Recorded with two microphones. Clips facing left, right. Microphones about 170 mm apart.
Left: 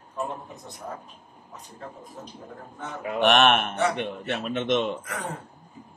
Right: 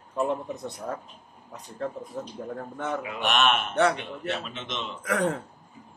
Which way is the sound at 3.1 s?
60° left (ahead or behind).